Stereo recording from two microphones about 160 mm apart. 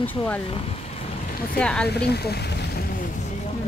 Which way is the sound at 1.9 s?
90° left.